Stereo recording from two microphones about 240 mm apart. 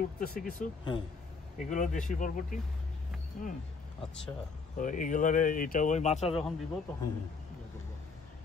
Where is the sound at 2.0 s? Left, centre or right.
Left.